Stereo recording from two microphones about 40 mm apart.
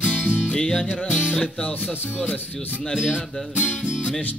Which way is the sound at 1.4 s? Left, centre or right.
Left.